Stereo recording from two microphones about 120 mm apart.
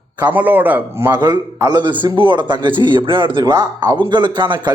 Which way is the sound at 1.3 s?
35° right (ahead or behind).